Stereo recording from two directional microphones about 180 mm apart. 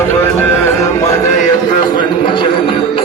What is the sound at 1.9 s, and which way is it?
Music, 25° left (ahead or behind).